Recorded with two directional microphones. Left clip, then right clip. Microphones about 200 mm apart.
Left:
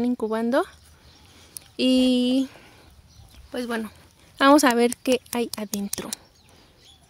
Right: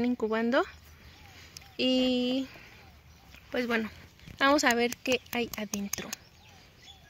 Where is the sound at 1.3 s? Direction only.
45° left (ahead or behind).